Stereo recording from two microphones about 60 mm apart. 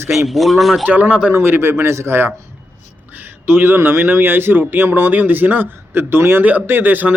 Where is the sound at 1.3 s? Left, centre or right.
Right.